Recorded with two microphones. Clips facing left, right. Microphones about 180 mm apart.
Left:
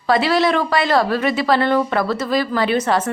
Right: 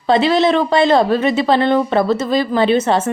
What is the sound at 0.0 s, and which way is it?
A woman's voice, 25° right (ahead or behind).